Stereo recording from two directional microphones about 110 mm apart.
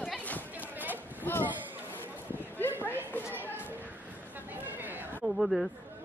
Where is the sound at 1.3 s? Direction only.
15° left (ahead or behind).